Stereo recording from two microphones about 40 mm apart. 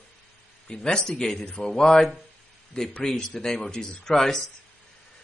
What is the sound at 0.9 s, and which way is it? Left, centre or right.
A man's voice, centre.